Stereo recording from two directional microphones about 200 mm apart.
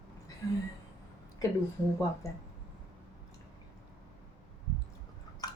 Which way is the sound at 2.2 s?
15° left (ahead or behind).